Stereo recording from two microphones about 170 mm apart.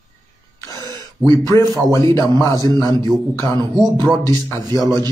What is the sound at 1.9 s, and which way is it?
A man's voice, 15° left (ahead or behind).